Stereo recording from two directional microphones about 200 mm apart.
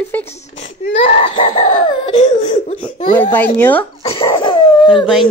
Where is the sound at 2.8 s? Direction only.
10° left (ahead or behind).